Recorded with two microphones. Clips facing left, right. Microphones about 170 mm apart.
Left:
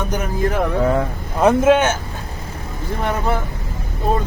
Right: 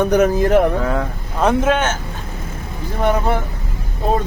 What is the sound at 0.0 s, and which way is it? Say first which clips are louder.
Speech: right 7 dB; 65° right (ahead or behind).